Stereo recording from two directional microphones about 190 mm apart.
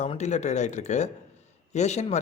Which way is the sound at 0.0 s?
35° left (ahead or behind).